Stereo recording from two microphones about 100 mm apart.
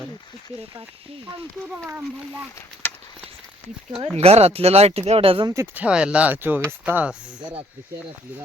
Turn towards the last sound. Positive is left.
turn(degrees=-15)  # may be behind; listen again after turning